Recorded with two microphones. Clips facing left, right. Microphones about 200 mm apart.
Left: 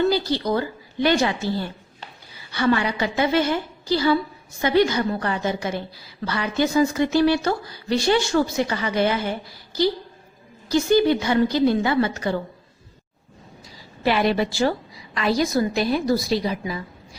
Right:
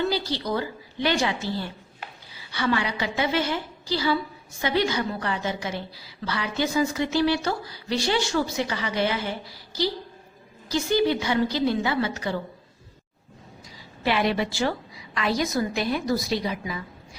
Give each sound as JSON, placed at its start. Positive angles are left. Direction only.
{"t": 0.1, "sound": "a woman's voice", "side_deg": 50}
{"t": 10.7, "sound": "speech", "side_deg": 50}
{"t": 14.0, "sound": "a woman's voice", "side_deg": 40}